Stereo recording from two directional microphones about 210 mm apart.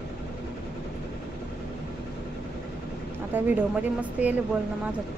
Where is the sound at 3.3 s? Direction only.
10° right (ahead or behind).